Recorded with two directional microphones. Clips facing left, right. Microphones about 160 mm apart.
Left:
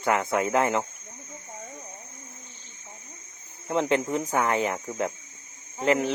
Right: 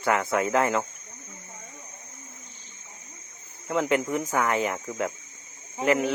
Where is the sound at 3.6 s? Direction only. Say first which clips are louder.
Even; 25° left (ahead or behind).